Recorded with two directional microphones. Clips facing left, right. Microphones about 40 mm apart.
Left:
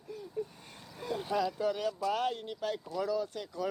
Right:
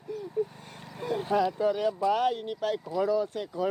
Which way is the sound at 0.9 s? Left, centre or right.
Right.